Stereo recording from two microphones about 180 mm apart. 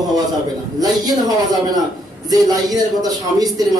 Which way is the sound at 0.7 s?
20° right (ahead or behind).